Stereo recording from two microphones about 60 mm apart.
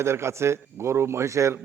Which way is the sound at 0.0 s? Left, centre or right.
Right.